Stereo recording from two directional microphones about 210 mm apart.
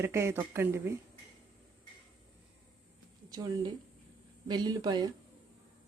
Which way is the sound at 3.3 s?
20° right (ahead or behind).